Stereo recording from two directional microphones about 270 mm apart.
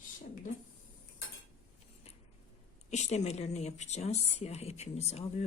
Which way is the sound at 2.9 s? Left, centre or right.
Left.